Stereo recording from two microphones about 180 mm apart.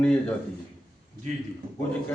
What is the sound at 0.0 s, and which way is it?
Speech, 5° left (ahead or behind).